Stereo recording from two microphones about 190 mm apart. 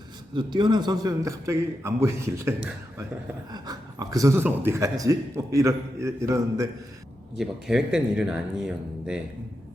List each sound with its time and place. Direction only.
0.3 s speech: 25° right (ahead or behind)
7.3 s speech: 5° right (ahead or behind)